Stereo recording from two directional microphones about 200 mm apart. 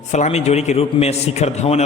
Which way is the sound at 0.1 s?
35° left (ahead or behind).